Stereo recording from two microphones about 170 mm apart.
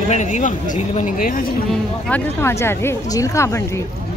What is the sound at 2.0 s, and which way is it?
Speech, 10° left (ahead or behind).